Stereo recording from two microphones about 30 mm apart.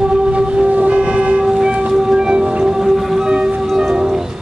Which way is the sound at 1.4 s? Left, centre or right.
Right.